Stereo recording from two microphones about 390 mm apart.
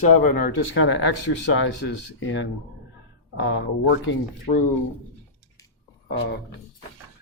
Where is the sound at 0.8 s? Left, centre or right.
Left.